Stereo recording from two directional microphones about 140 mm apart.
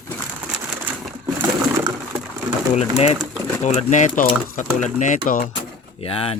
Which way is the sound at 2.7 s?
50° left (ahead or behind).